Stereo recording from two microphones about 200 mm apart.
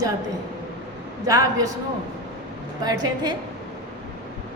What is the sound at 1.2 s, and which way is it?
Speech, 15° right (ahead or behind).